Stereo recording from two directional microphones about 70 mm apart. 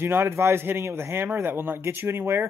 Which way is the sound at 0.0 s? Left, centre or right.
Right.